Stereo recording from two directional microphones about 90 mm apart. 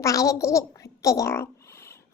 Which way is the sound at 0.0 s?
35° left (ahead or behind).